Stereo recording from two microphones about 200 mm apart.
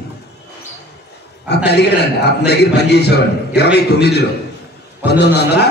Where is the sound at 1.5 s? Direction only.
55° left (ahead or behind).